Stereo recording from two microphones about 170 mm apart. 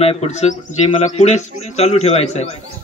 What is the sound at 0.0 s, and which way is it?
A man's voice, 35° left (ahead or behind).